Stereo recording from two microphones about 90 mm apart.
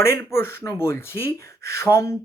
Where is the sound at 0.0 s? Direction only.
30° left (ahead or behind).